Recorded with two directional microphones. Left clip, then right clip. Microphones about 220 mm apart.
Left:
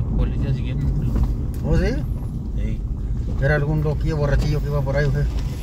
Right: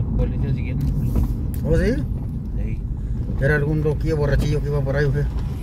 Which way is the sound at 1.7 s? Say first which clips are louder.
Right 3 dB; 15° right (ahead or behind).